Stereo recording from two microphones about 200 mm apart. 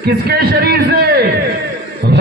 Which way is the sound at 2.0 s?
55° right (ahead or behind).